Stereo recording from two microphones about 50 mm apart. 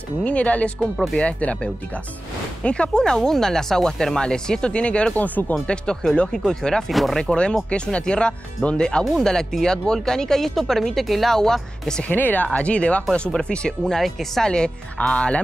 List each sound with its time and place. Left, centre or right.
0.2 s speech: left
5.1 s speech: left
5.5 s speech: centre
6.9 s speech: centre
7.2 s speech: centre
12.1 s speech: left
12.5 s speech: left; by 14.5 s centre
14.5 s speech: left